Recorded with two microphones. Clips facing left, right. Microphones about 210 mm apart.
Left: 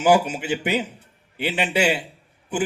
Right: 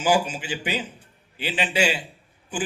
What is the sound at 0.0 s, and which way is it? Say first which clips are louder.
A man's voice: left 4 dB; 60° left (ahead or behind).